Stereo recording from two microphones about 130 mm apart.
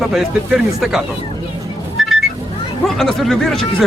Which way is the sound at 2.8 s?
Centre (ahead or behind).